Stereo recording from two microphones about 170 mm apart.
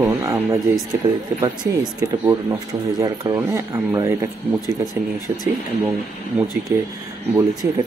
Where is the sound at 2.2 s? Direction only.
15° right (ahead or behind).